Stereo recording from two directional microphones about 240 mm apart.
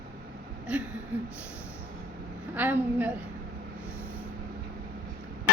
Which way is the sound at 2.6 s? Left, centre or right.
Centre.